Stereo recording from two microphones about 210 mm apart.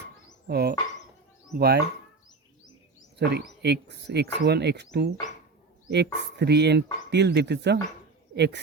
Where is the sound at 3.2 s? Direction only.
55° right (ahead or behind).